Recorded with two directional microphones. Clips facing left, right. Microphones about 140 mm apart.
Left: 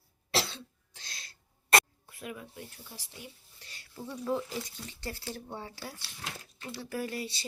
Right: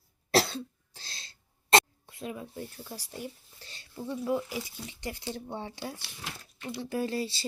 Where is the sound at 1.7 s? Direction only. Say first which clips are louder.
Right 3 dB; 25° right (ahead or behind); by 3.2 s 45° right (ahead or behind).